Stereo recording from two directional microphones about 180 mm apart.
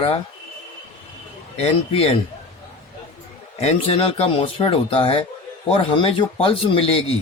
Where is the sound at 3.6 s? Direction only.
35° left (ahead or behind).